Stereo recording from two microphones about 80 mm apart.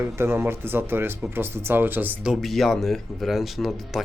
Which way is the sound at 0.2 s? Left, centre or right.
Right.